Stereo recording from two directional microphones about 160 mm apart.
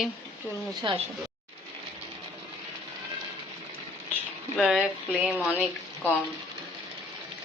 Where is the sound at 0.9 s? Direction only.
30° right (ahead or behind).